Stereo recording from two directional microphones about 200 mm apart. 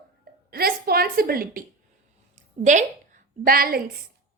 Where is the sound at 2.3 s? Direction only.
35° right (ahead or behind).